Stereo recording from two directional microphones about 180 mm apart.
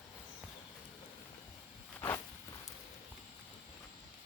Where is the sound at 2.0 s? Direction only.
15° left (ahead or behind).